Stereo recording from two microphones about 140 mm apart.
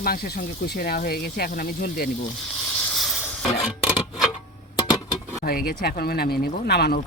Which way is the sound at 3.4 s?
50° left (ahead or behind).